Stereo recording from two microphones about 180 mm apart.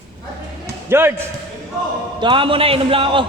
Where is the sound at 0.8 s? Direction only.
15° right (ahead or behind).